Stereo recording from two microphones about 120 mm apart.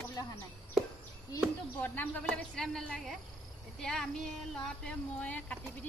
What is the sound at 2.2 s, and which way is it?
Speech, 5° left (ahead or behind).